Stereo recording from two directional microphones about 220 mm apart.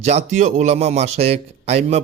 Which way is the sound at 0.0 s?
30° right (ahead or behind).